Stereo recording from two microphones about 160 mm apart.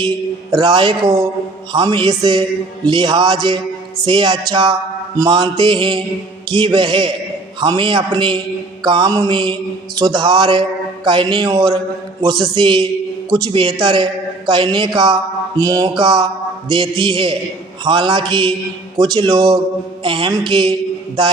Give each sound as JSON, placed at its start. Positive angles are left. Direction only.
{"t": 0.5, "sound": "a man's voice", "side_deg": -30}